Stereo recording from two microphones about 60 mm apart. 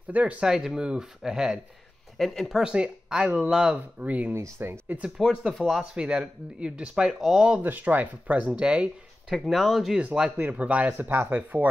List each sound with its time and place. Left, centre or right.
0.1 s speech: right
0.5 s speech: centre
2.1 s speech: centre
2.6 s speech: centre
5.1 s speech: centre
5.9 s speech: centre
7.2 s speech: centre
7.6 s speech: right
9.3 s speech: centre
9.9 s speech: centre; by 11.7 s right